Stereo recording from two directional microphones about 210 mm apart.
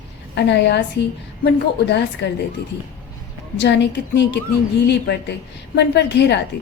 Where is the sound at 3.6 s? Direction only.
55° left (ahead or behind).